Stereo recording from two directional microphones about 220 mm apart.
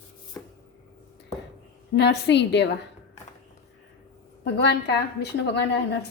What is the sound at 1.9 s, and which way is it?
Speech, 50° left (ahead or behind).